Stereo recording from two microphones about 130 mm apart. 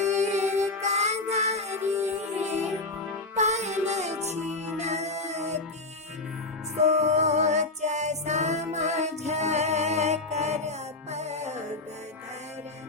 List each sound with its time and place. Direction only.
0.2 s music: 60° right (ahead or behind)
6.7 s music: 60° right (ahead or behind)